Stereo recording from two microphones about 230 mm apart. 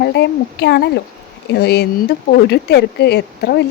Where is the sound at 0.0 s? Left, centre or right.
Left.